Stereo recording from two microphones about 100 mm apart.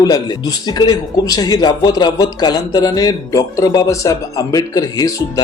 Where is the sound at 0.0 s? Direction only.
40° left (ahead or behind).